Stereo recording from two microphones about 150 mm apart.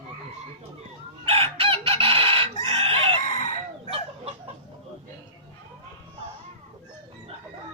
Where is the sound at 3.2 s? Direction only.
50° left (ahead or behind).